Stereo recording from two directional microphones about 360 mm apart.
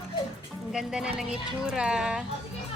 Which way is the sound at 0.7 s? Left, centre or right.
Centre.